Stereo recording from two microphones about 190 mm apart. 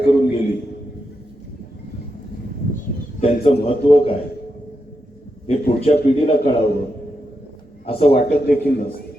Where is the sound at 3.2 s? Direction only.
35° left (ahead or behind).